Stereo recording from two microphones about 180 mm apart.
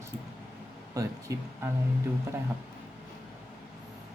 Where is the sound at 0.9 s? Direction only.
20° right (ahead or behind).